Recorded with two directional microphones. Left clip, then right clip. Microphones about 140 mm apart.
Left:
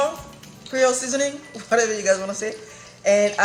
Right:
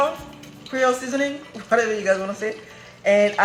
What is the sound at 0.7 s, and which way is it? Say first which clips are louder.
Speech: left 1 dB; 15° left (ahead or behind).